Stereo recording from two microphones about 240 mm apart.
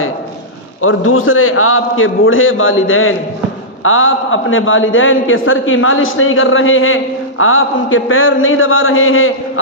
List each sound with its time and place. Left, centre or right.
0.8 s a man's voice: left